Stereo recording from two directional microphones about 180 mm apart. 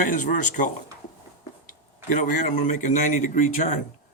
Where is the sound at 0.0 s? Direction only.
45° left (ahead or behind).